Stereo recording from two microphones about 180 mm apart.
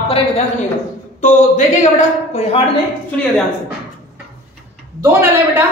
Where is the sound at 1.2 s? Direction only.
45° left (ahead or behind).